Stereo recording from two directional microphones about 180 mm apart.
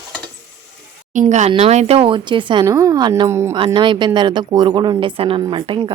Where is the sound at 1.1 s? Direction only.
40° right (ahead or behind).